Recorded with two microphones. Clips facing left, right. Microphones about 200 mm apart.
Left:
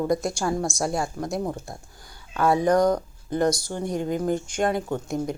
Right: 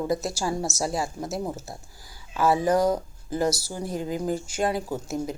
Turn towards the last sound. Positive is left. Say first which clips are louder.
# left 2 dB
turn(degrees=-5)  # may be behind; listen again after turning